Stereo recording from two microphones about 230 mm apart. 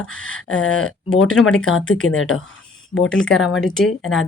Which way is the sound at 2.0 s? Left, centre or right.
Left.